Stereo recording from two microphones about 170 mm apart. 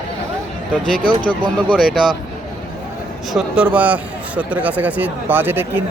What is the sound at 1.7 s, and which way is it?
Speech, centre (ahead or behind).